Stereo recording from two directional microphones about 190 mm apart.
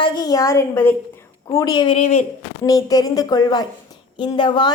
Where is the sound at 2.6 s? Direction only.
20° left (ahead or behind).